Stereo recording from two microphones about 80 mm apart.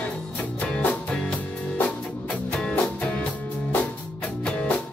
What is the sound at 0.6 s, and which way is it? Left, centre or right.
Music, centre.